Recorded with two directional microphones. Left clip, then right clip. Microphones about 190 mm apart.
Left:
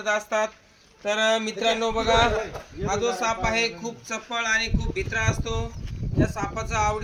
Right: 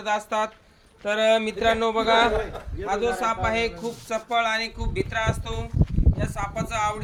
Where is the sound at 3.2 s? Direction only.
25° right (ahead or behind).